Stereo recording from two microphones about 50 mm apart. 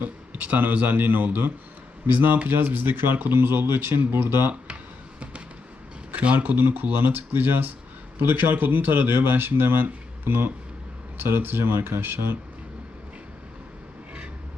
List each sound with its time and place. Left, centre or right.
0.0 s speech: right
6.1 s speech: right